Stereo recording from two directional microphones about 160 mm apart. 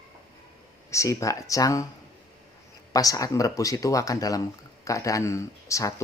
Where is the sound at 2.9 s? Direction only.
20° left (ahead or behind).